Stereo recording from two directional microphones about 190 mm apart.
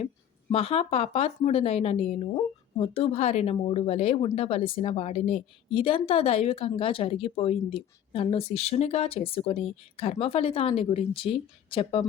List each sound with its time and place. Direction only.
0.5 s speech: 30° left (ahead or behind)